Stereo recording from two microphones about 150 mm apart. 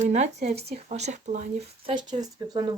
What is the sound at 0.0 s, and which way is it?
Speech, 50° right (ahead or behind).